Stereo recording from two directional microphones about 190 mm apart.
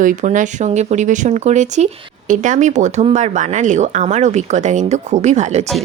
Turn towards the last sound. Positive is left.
turn(degrees=-35)  # may be behind; listen again after turning